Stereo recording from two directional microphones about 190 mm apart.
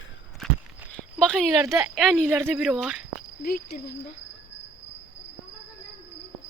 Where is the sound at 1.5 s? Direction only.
15° right (ahead or behind).